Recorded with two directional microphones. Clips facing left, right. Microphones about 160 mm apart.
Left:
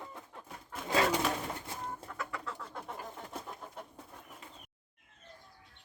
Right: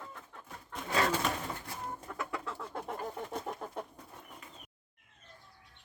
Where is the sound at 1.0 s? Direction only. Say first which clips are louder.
Even; 5° left (ahead or behind).